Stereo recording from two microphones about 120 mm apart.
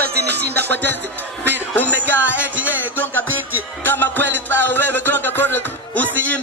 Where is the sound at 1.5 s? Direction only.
15° left (ahead or behind).